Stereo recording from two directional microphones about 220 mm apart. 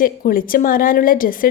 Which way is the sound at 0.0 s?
40° left (ahead or behind).